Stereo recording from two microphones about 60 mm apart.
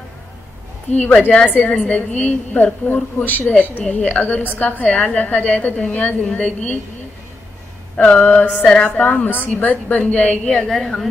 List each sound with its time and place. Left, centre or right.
1.3 s a woman's voice: centre
8.0 s a woman's voice: left
10.7 s a woman's voice: centre